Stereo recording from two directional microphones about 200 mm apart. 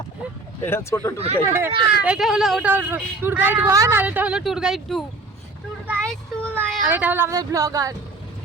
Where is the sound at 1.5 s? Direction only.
10° right (ahead or behind).